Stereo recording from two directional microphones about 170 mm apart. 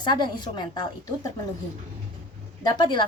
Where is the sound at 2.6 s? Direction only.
25° left (ahead or behind).